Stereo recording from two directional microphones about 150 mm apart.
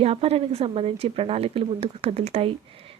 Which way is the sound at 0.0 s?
40° right (ahead or behind).